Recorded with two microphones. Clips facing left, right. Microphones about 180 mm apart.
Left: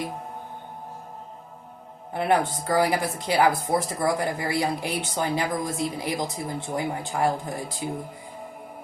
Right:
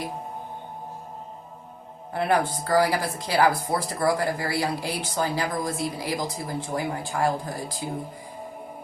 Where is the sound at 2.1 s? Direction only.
20° left (ahead or behind).